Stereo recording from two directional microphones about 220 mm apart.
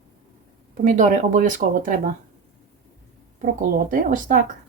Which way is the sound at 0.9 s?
35° right (ahead or behind).